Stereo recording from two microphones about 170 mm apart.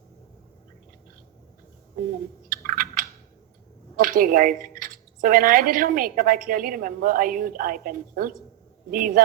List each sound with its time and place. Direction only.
2.5 s chewing: 55° right (ahead or behind)
3.9 s a man's voice: 55° right (ahead or behind)